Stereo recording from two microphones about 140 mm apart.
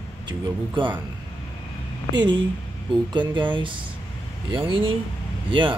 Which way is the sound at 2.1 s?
30° right (ahead or behind).